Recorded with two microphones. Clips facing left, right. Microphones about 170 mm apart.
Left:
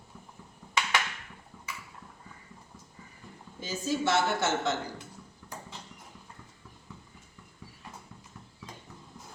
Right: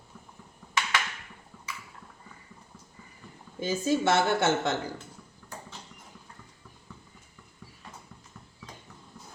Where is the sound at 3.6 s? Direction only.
55° right (ahead or behind).